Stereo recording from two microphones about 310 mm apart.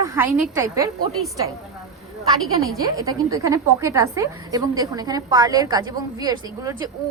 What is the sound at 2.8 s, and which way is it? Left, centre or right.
A woman's voice, centre.